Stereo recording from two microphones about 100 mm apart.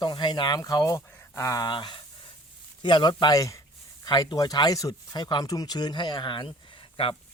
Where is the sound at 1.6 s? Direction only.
50° left (ahead or behind).